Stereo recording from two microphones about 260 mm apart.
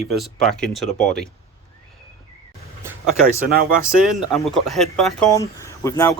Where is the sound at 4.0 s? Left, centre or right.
Centre.